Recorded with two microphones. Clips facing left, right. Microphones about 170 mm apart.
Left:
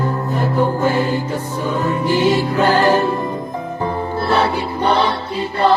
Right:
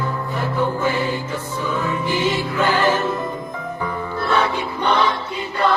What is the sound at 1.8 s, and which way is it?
Music, 40° left (ahead or behind).